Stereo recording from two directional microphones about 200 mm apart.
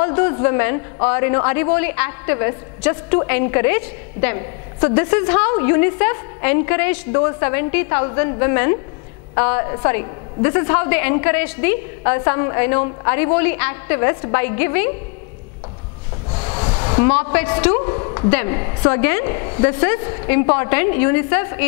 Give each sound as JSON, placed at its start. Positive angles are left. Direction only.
{"t": 0.0, "sound": "a sound", "side_deg": 15}
{"t": 1.0, "sound": "a woman's voice", "side_deg": 15}
{"t": 16.4, "sound": "a sound", "side_deg": 25}
{"t": 17.1, "sound": "a woman's voice", "side_deg": 10}
{"t": 17.8, "sound": "a woman's voice", "side_deg": 25}
{"t": 18.3, "sound": "a woman's voice", "side_deg": 15}